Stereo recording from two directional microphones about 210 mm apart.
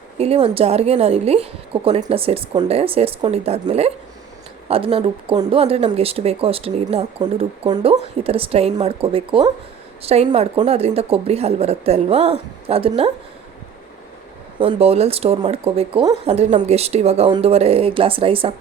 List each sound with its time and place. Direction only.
0.2 s speech: 25° right (ahead or behind)
14.6 s speech: 25° right (ahead or behind)